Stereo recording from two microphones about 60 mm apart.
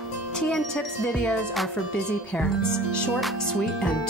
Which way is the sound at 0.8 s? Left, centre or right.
Centre.